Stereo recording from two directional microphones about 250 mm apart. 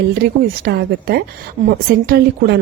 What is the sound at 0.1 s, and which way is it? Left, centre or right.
A woman's voice, right.